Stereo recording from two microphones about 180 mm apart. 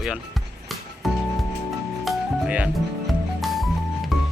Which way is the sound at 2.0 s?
Centre (ahead or behind).